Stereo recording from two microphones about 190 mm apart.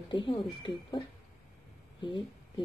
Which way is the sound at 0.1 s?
25° left (ahead or behind).